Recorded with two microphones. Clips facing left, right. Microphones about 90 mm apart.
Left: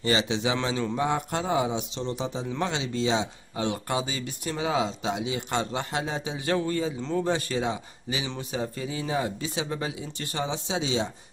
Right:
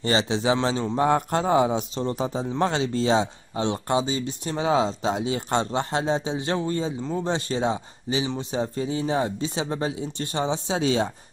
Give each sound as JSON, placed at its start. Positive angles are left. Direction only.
{"t": 0.0, "sound": "speech", "side_deg": -35}
{"t": 1.0, "sound": "a man's voice", "side_deg": -45}
{"t": 3.6, "sound": "speech", "side_deg": -30}
{"t": 10.8, "sound": "a man's voice", "side_deg": -50}